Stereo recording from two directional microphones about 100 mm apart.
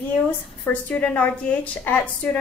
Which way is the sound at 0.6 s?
15° left (ahead or behind).